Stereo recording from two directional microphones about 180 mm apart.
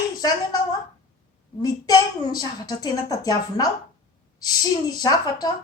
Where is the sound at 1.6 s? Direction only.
20° left (ahead or behind).